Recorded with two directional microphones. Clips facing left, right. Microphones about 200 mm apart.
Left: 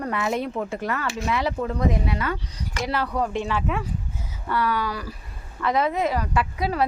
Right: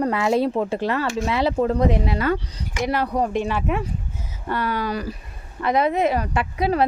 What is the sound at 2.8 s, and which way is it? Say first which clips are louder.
A woman's voice: right 3 dB; 20° right (ahead or behind).